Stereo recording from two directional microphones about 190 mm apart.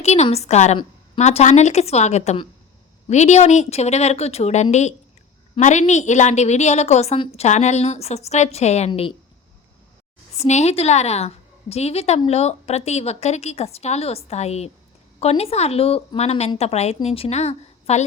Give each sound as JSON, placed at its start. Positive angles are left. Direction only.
{"t": 0.0, "sound": "a woman's voice", "side_deg": 35}
{"t": 10.3, "sound": "a woman's voice", "side_deg": 35}